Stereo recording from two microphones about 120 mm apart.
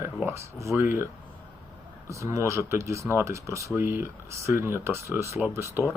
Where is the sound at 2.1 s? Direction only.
25° right (ahead or behind).